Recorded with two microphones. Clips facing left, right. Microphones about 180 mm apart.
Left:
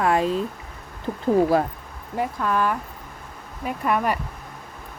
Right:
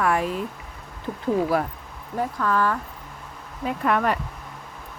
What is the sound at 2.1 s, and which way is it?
Speech, 15° left (ahead or behind).